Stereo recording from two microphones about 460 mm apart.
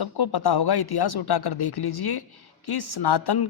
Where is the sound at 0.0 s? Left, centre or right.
Left.